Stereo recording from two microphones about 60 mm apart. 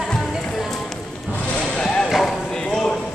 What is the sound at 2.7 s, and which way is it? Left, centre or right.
Clip-clop, centre.